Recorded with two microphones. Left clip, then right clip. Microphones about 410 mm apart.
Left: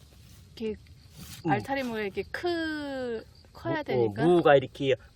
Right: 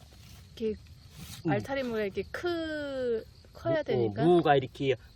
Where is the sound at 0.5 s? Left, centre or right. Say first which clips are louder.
Right 1 dB; centre.